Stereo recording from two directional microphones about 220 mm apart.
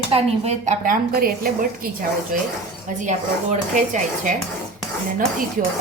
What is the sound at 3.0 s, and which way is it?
Speech, 35° right (ahead or behind).